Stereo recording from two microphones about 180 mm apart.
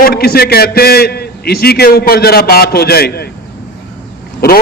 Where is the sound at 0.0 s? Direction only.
60° left (ahead or behind).